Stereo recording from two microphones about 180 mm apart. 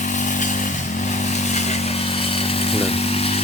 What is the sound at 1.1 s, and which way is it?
Chainsaw, 40° left (ahead or behind).